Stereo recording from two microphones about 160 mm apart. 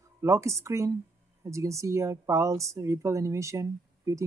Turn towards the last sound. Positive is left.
turn(degrees=-20)  # may be behind; listen again after turning